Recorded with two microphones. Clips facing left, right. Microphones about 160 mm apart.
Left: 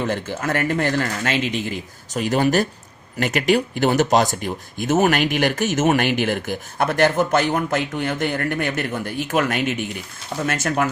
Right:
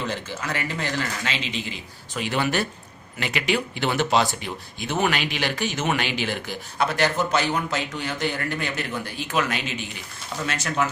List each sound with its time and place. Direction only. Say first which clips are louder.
0.0 s speech: left 6 dB; 50° left (ahead or behind)